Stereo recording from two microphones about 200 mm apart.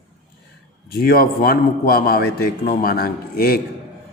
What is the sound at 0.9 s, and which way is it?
A man's voice, 50° left (ahead or behind).